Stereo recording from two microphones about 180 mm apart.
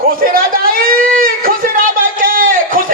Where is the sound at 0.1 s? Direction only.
55° right (ahead or behind).